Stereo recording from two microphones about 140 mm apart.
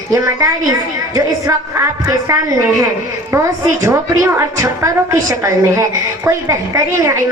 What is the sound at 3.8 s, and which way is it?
A woman's voice, 20° right (ahead or behind).